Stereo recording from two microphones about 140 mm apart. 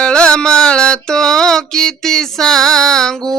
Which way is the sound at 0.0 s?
5° left (ahead or behind).